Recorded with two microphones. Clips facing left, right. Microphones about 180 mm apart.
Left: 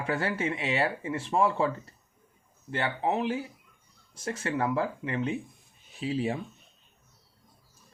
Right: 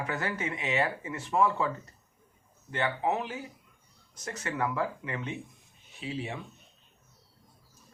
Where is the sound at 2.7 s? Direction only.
30° left (ahead or behind).